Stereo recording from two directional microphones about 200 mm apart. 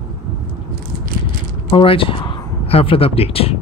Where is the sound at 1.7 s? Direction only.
25° left (ahead or behind).